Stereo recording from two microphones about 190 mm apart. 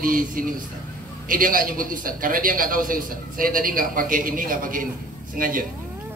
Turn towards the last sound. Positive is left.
turn(degrees=-45)  # may be behind; listen again after turning